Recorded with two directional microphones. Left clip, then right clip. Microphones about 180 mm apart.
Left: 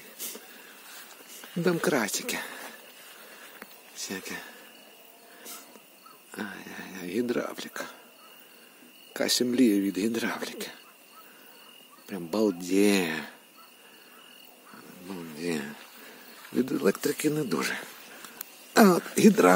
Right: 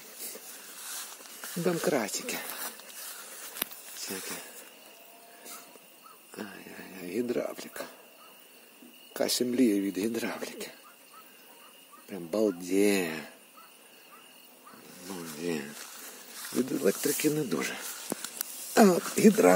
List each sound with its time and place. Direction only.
0.9 s a sound: 75° right (ahead or behind)
1.6 s speech: 20° left (ahead or behind)
3.9 s a sound: 20° left (ahead or behind)
6.3 s speech: 20° left (ahead or behind)
9.1 s speech: 15° left (ahead or behind)
12.1 s speech: 20° left (ahead or behind)
15.1 s a sound: 5° left (ahead or behind)
16.6 s speech: 15° left (ahead or behind)
17.2 s speech: centre (ahead or behind)
17.5 s speech: 15° left (ahead or behind)